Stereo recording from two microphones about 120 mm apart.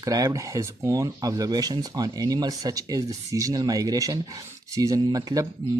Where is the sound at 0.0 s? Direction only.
30° right (ahead or behind).